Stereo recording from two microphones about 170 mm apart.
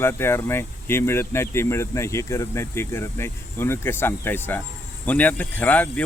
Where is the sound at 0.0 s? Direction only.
15° left (ahead or behind).